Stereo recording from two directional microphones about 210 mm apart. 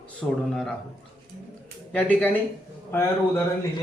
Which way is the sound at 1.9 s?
5° left (ahead or behind).